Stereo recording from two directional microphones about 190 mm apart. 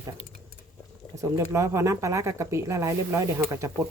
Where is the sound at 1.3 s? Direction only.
15° right (ahead or behind).